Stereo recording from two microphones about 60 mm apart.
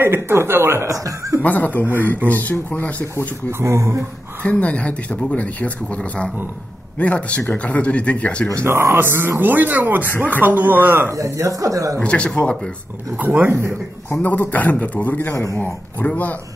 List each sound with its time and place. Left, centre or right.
0.0 s speech: right
0.8 s speech: right
1.4 s speech: left
3.4 s speech: right
4.5 s speech: left
8.5 s speech: right
10.0 s speech: left
10.4 s speech: right
11.1 s speech: right
12.0 s speech: centre
13.2 s speech: right
14.1 s speech: left
15.3 s speech: left
15.6 s speech: left